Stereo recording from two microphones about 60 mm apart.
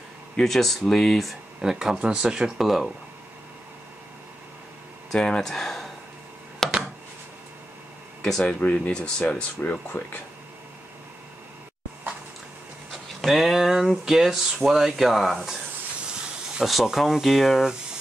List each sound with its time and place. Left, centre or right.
0.4 s speech: centre
1.6 s speech: centre
5.1 s speech: centre
5.5 s a sound: centre
8.2 s speech: centre
8.5 s speech: left
13.2 s speech: centre
16.6 s speech: centre